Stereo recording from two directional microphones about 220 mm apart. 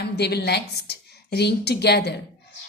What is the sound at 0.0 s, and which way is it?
A woman's voice, 50° left (ahead or behind).